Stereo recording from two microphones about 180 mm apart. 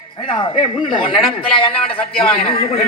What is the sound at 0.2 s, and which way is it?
A man's voice, 25° left (ahead or behind).